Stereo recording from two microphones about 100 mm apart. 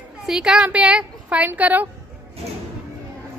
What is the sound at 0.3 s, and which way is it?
A woman's voice, 5° right (ahead or behind).